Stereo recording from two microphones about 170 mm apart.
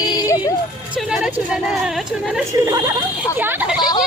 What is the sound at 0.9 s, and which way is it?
Speech, 5° right (ahead or behind).